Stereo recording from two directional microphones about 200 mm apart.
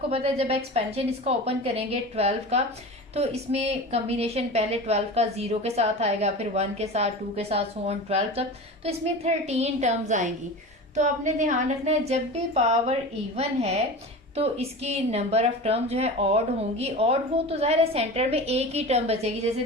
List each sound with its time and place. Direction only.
0.1 s a woman's voice: 30° right (ahead or behind)